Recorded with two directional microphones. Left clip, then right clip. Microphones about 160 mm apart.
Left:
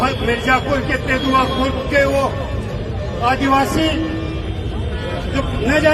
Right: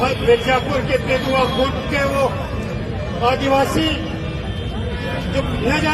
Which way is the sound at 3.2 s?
30° left (ahead or behind).